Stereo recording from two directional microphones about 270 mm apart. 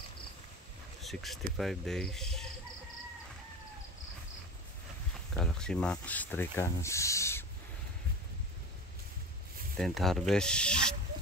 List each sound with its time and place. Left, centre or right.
1.0 s speech: centre
5.3 s speech: centre
9.8 s speech: centre